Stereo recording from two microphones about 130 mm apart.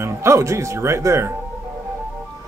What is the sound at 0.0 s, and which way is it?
Speech, 20° right (ahead or behind).